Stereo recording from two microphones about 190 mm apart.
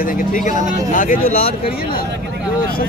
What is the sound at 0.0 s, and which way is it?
Speech, 45° left (ahead or behind).